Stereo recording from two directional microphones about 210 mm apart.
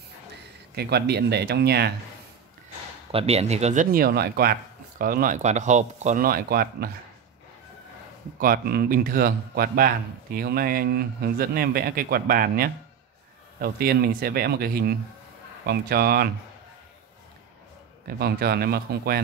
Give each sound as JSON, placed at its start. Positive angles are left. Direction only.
{"t": 0.7, "sound": "a man's voice", "side_deg": -50}
{"t": 3.1, "sound": "speech", "side_deg": -30}
{"t": 8.4, "sound": "a man's voice", "side_deg": -45}
{"t": 18.0, "sound": "a man's voice", "side_deg": -50}